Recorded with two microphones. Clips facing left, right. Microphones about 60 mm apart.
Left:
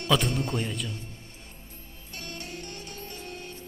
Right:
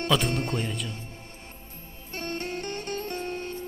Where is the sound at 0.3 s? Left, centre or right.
Right.